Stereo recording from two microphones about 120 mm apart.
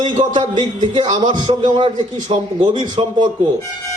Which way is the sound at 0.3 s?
40° right (ahead or behind).